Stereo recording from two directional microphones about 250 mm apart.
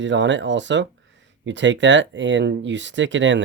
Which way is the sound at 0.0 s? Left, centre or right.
Right.